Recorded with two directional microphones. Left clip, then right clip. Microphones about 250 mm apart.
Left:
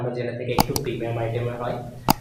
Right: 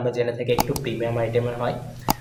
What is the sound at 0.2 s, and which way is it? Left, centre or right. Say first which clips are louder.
Speech: right 6 dB; right.